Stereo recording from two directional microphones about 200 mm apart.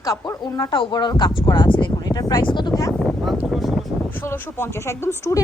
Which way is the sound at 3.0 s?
Centre (ahead or behind).